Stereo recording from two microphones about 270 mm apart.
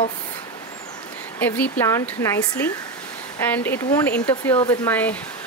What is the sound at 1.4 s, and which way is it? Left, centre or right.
Speech, centre.